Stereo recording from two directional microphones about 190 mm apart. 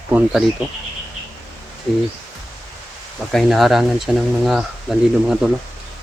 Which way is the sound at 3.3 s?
Centre (ahead or behind).